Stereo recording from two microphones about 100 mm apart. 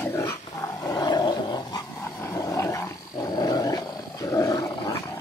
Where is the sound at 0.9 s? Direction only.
45° left (ahead or behind).